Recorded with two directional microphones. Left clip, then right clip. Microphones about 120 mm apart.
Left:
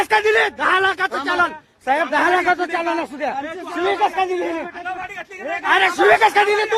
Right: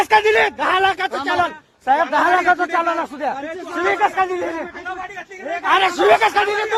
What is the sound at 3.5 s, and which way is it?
Speech, 50° left (ahead or behind).